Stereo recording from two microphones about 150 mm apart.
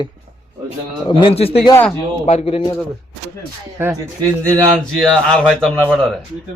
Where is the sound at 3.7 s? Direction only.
15° right (ahead or behind).